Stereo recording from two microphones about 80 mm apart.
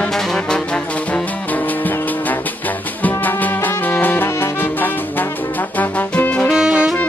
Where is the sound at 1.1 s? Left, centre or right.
Left.